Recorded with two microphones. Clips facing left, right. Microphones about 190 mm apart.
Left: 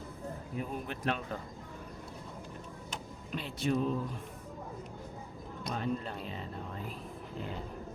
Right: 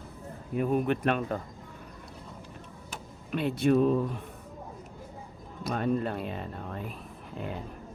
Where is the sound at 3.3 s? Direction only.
60° right (ahead or behind).